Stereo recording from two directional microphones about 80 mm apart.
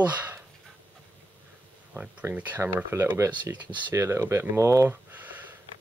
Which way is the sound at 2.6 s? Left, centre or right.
Right.